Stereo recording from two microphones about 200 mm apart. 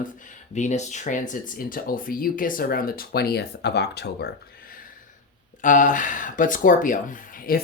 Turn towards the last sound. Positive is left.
turn(degrees=45)  # may be behind; listen again after turning